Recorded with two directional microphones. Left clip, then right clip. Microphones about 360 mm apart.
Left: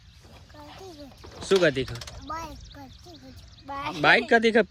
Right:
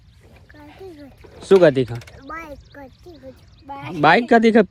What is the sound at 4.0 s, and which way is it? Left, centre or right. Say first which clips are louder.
Speech: right 6 dB; centre.